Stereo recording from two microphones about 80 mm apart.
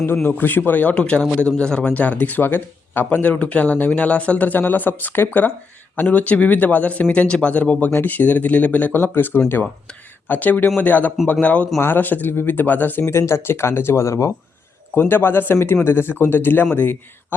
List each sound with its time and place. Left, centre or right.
0.0 s speech: left
14.9 s speech: left